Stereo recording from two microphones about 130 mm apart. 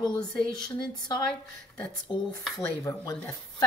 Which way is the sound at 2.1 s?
30° left (ahead or behind).